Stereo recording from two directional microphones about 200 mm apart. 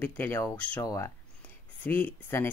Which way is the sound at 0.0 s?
10° left (ahead or behind).